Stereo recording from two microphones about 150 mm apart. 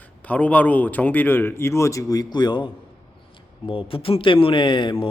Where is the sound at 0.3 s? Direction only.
10° left (ahead or behind); by 2.6 s 30° left (ahead or behind).